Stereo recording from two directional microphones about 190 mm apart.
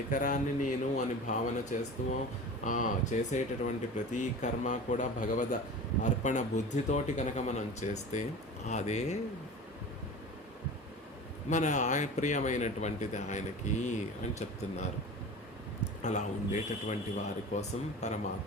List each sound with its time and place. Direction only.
0.1 s speech: 45° left (ahead or behind)
11.4 s speech: 40° left (ahead or behind)
16.0 s speech: 40° left (ahead or behind)